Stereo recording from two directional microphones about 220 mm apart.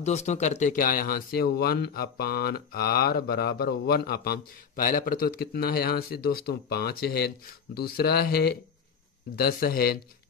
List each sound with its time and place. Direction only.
0.0 s speech: 30° left (ahead or behind)